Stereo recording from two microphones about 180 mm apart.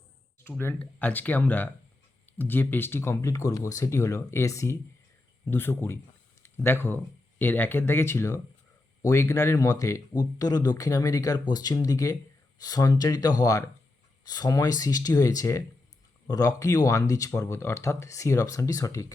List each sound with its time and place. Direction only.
0.4 s speech: 10° left (ahead or behind)